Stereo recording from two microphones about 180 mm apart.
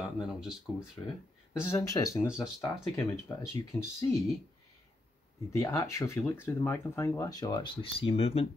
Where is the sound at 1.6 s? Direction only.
20° left (ahead or behind).